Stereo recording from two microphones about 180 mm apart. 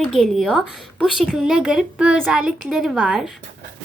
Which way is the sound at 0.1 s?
Centre (ahead or behind).